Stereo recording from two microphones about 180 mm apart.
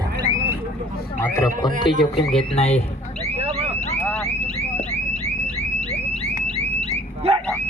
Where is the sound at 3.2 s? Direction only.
35° right (ahead or behind).